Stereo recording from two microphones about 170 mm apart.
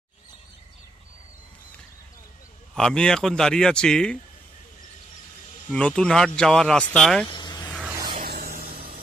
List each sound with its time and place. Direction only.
2.7 s speech: 5° left (ahead or behind)
5.7 s speech: 5° left (ahead or behind)
7.3 s vehicle: 25° left (ahead or behind)
8.3 s a sound: 60° right (ahead or behind)